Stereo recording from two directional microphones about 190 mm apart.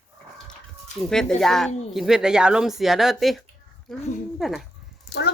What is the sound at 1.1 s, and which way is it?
Speech, 5° left (ahead or behind).